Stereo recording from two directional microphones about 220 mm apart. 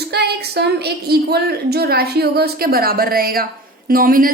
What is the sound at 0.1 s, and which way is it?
A woman's voice, 45° right (ahead or behind).